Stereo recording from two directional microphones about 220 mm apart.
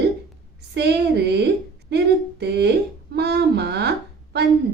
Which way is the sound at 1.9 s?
50° right (ahead or behind).